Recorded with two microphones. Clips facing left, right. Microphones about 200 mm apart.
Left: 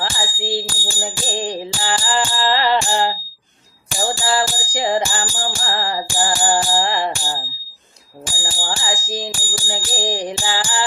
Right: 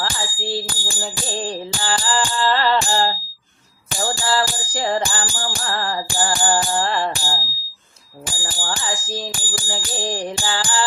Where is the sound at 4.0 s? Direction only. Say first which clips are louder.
Left 1 dB; 15° left (ahead or behind).